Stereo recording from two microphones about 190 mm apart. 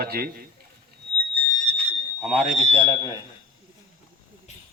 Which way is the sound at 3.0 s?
20° left (ahead or behind).